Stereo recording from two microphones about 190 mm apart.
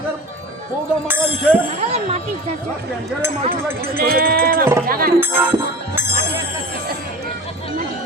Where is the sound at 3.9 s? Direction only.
50° right (ahead or behind).